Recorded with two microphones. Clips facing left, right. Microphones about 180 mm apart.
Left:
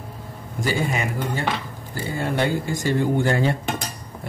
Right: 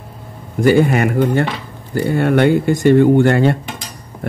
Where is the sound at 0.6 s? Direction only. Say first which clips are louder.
Right 12 dB; 60° right (ahead or behind).